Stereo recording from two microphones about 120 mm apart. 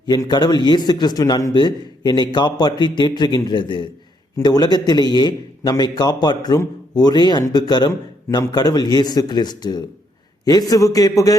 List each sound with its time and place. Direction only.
0.0 s a man's voice: 35° left (ahead or behind)